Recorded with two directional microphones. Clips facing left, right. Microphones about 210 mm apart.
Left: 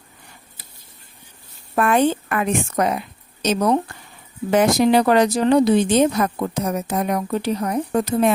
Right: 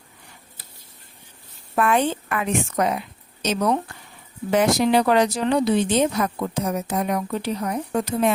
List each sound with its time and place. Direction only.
1.7 s speech: 45° left (ahead or behind)